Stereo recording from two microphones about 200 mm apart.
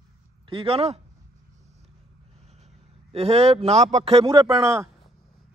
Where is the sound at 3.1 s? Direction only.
30° right (ahead or behind).